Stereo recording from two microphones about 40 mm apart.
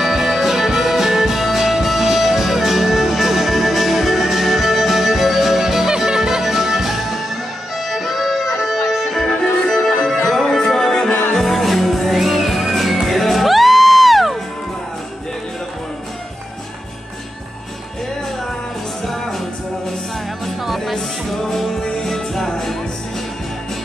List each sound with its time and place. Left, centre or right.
0.0 s music: centre
9.2 s music: centre
9.8 s music: centre
19.0 s music: centre
20.4 s music: centre